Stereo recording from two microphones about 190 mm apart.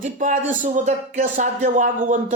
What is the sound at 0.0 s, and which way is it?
A woman's voice, 40° right (ahead or behind).